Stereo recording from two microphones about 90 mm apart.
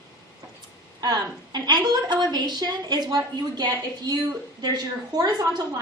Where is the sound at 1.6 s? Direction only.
50° right (ahead or behind).